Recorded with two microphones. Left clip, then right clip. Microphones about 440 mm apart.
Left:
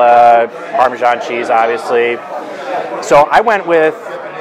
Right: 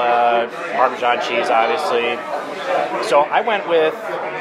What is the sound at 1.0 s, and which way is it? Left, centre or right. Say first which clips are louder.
Speech: left 4 dB; left.